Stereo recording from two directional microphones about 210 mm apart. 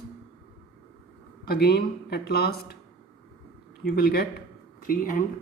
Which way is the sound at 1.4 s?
45° left (ahead or behind).